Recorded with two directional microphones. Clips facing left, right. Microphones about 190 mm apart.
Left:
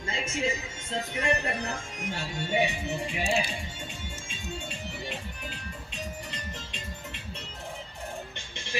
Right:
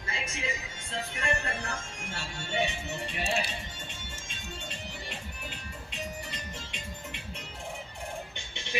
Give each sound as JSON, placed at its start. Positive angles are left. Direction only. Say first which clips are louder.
{"t": 0.0, "sound": "music", "louder": "left 4 dB", "side_deg": 25}
{"t": 0.9, "sound": "speech", "louder": "left 4 dB", "side_deg": 20}